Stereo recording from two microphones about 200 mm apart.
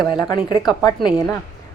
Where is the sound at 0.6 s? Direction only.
20° left (ahead or behind).